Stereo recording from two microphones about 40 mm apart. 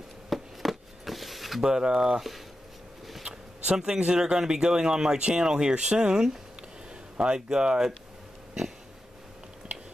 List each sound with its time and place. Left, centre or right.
0.3 s a sound: centre
1.6 s speech: centre
3.7 s speech: centre